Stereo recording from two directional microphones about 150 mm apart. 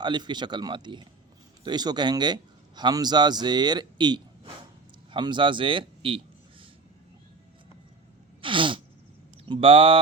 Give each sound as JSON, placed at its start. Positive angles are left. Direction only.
{"t": 0.0, "sound": "a man's voice", "side_deg": -30}
{"t": 8.4, "sound": "sneeze", "side_deg": -35}
{"t": 9.5, "sound": "speech", "side_deg": -35}